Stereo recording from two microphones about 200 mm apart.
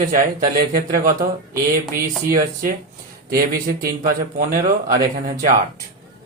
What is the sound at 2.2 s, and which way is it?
Speech, 45° right (ahead or behind).